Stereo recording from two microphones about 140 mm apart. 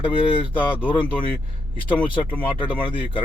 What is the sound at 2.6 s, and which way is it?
Speech, 35° left (ahead or behind).